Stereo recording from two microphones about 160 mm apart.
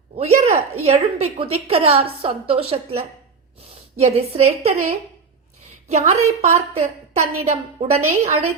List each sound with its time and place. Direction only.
0.2 s a woman's voice: 40° right (ahead or behind)